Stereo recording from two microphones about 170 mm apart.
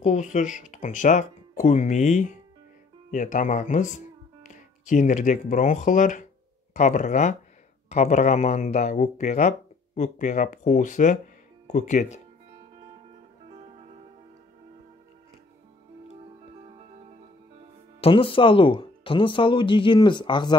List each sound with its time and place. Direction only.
0.0 s speech: 45° left (ahead or behind)
18.0 s speech: 30° left (ahead or behind)